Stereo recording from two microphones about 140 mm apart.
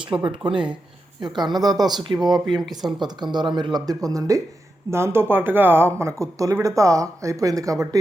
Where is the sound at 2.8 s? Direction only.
Centre (ahead or behind).